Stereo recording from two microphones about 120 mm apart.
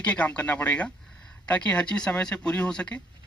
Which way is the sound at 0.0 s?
10° left (ahead or behind).